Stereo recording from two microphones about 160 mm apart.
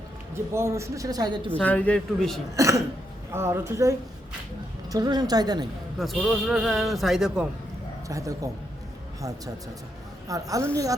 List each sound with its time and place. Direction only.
0.5 s speech: 15° right (ahead or behind)
1.5 s a man's voice: 10° left (ahead or behind)
2.6 s a woman's voice: 20° right (ahead or behind)
6.0 s a man's voice: centre (ahead or behind)
8.0 s a man's voice: 20° right (ahead or behind)
10.2 s speech: 20° right (ahead or behind)